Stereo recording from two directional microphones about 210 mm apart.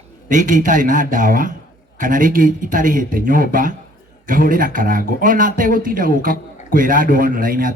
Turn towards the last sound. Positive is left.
turn(degrees=-40)  # may be behind; listen again after turning